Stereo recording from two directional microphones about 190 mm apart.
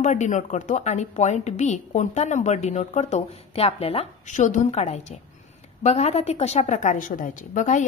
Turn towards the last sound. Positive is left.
turn(degrees=40)  # may be behind; listen again after turning